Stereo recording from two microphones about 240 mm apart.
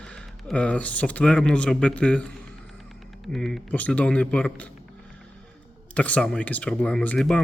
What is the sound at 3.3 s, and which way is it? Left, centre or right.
Speech, centre.